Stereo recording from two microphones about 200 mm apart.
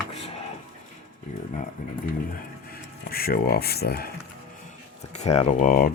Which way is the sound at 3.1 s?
50° left (ahead or behind).